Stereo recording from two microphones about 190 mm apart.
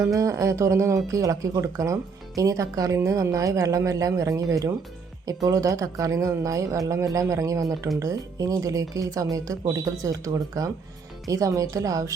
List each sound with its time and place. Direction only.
0.1 s speech: 15° right (ahead or behind)